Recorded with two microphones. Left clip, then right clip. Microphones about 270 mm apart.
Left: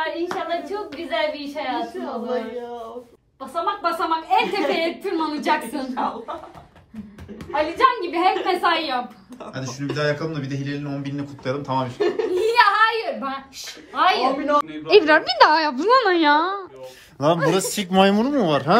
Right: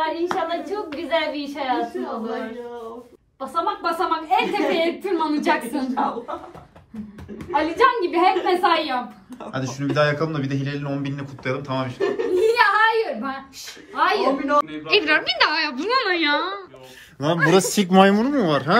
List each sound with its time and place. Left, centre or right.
0.0 s a sound: centre
3.3 s a woman's voice: centre
7.5 s a woman's voice: centre
17.5 s a woman's voice: centre